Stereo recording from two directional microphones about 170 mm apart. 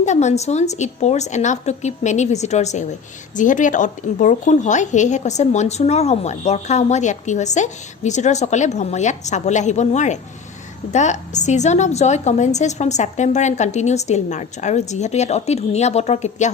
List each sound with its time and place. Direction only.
0.0 s a woman's voice: 45° left (ahead or behind)